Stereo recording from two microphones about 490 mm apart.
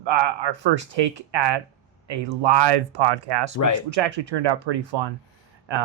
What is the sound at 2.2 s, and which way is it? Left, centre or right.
Speech, right.